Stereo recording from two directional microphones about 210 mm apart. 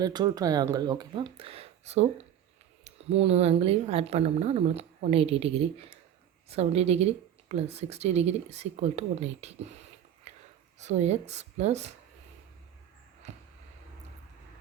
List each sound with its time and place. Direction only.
0.0 s speech: 20° right (ahead or behind)
10.3 s a sound: 35° right (ahead or behind)
10.8 s speech: 30° right (ahead or behind)